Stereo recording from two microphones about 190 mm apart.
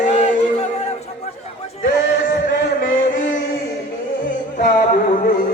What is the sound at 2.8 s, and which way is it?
Music, 45° left (ahead or behind).